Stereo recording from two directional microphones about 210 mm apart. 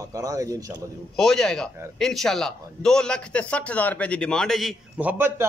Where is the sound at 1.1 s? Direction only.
5° left (ahead or behind).